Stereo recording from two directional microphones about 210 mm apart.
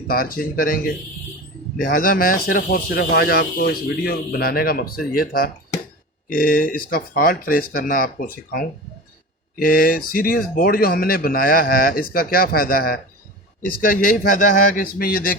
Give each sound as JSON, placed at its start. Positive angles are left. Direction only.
{"t": 0.1, "sound": "speech", "side_deg": 45}